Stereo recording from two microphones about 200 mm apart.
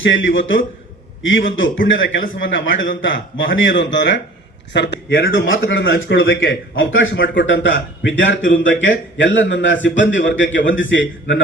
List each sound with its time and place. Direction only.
0.0 s a man's voice: 70° left (ahead or behind)
5.3 s a man's voice: 80° left